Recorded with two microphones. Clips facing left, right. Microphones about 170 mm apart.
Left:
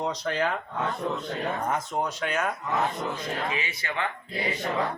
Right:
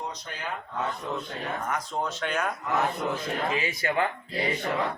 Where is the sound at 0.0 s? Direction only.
90° left.